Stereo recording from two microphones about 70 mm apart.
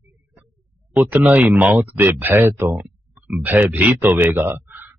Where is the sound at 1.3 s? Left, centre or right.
Right.